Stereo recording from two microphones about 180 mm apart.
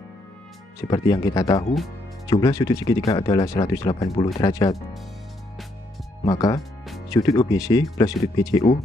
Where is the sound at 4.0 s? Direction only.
30° left (ahead or behind).